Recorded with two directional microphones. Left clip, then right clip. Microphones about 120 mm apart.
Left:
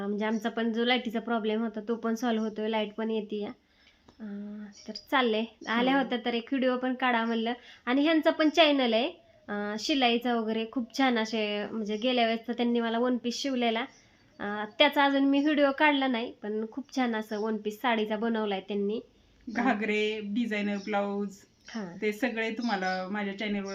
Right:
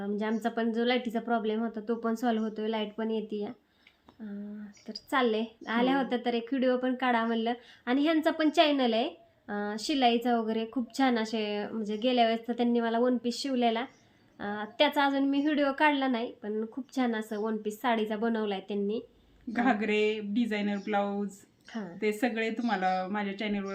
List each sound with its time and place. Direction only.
0.0 s a woman's voice: 35° left (ahead or behind)
19.5 s speech: 15° right (ahead or behind)
21.7 s a woman's voice: 30° left (ahead or behind)
22.0 s speech: 15° right (ahead or behind)